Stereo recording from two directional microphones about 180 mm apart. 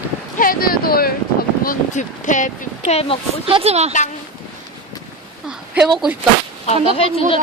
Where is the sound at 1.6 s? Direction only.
45° left (ahead or behind).